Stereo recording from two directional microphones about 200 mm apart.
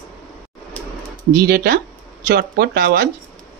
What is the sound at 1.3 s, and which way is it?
Speech, 45° right (ahead or behind).